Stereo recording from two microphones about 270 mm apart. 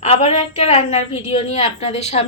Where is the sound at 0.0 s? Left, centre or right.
Left.